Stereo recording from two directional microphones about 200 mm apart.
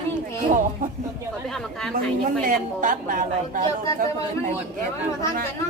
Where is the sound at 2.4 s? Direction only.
40° right (ahead or behind).